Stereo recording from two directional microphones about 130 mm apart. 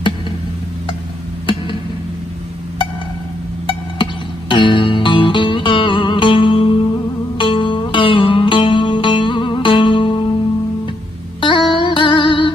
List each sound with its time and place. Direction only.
3.6 s music: 40° left (ahead or behind)
11.4 s music: 40° left (ahead or behind)